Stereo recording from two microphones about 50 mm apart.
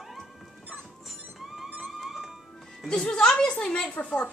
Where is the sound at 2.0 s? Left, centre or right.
Centre.